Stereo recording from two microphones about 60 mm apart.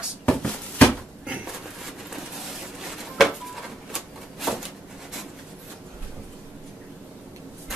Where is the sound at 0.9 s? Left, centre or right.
Centre.